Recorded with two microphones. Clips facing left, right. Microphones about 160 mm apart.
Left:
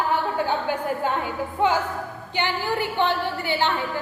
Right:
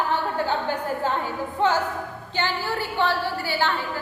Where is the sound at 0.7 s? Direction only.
15° left (ahead or behind).